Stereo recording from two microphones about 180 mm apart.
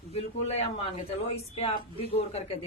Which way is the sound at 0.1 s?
35° left (ahead or behind).